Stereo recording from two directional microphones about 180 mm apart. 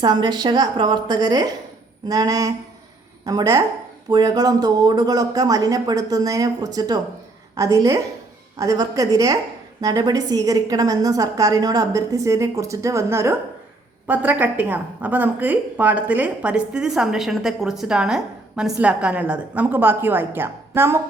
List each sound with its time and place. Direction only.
0.0 s a woman's voice: 25° right (ahead or behind)